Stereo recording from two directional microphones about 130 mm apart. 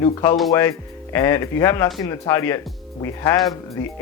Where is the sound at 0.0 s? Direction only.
25° left (ahead or behind).